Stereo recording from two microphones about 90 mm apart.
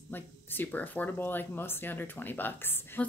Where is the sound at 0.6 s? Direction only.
15° left (ahead or behind).